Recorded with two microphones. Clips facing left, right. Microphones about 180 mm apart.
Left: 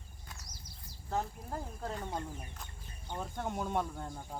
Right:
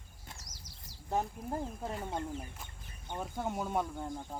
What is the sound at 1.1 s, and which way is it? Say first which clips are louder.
Speech: right 3 dB; 20° right (ahead or behind).